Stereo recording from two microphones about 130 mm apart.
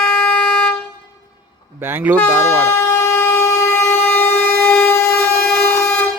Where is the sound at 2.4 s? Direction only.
15° left (ahead or behind).